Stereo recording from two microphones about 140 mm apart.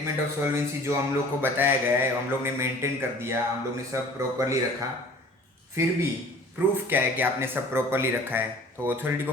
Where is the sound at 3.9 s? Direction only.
20° right (ahead or behind).